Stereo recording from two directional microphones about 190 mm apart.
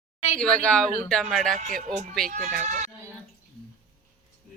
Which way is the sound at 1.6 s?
45° right (ahead or behind).